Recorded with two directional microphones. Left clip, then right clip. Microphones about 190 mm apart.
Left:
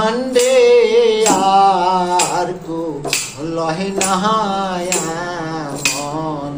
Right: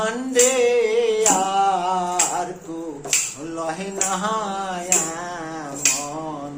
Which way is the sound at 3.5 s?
20° right (ahead or behind).